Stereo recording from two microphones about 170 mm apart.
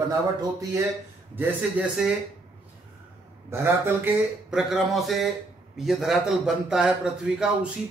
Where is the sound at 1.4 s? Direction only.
10° right (ahead or behind).